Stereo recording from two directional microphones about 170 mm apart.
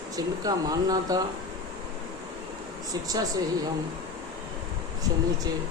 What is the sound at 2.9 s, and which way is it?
Speech, 20° right (ahead or behind).